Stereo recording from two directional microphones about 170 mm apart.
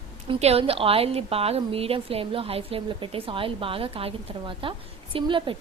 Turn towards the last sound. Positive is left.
turn(degrees=-30)  # may be behind; listen again after turning